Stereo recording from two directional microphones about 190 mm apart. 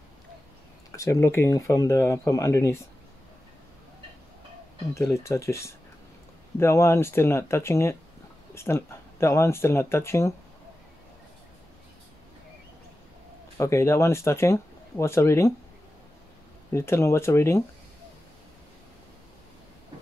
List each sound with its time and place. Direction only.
0.9 s speech: 15° left (ahead or behind)
4.9 s speech: 15° left (ahead or behind)
13.6 s speech: 15° left (ahead or behind)
16.7 s speech: 15° left (ahead or behind)